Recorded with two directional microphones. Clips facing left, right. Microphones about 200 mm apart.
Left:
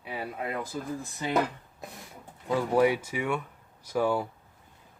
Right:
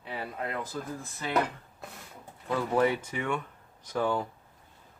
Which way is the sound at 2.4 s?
10° left (ahead or behind).